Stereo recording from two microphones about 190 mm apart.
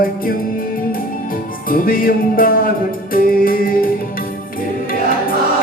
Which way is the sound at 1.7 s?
50° left (ahead or behind).